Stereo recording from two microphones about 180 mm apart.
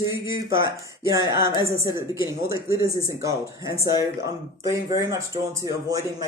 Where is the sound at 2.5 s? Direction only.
15° right (ahead or behind).